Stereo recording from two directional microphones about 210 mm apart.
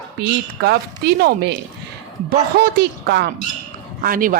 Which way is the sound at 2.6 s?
50° right (ahead or behind).